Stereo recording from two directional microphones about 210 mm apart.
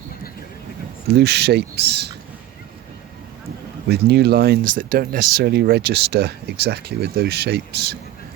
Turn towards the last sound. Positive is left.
turn(degrees=-50)  # may be behind; listen again after turning